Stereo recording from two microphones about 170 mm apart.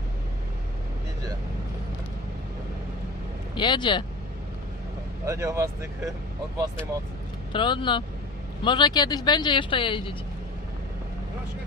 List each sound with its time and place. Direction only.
3.5 s speech: 25° left (ahead or behind)
5.2 s speech: 20° right (ahead or behind)
7.5 s speech: 30° left (ahead or behind)